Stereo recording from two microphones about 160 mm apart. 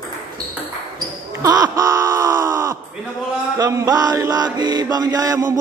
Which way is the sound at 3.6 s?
20° right (ahead or behind).